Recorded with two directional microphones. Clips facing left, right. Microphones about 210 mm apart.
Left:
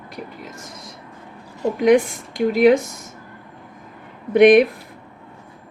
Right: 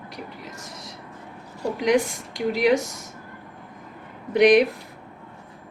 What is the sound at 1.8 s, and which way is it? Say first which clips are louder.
A woman's voice: left 6 dB; 55° left (ahead or behind).